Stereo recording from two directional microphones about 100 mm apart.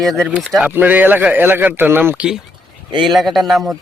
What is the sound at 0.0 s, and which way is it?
Speech, centre (ahead or behind).